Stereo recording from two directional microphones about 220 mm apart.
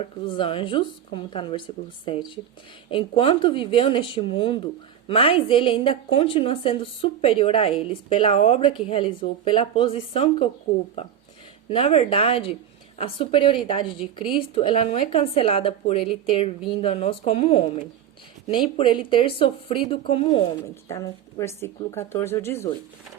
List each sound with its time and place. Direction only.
0.0 s speech: 25° left (ahead or behind)
11.7 s speech: 25° left (ahead or behind)